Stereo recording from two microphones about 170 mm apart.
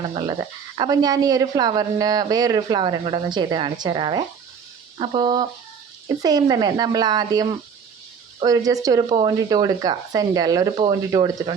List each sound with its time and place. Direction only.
0.0 s speech: 30° right (ahead or behind)